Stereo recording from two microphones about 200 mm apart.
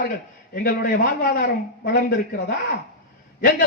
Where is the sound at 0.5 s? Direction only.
50° left (ahead or behind).